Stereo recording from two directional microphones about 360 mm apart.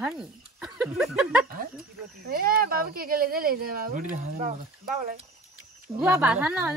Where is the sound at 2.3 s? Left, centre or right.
Right.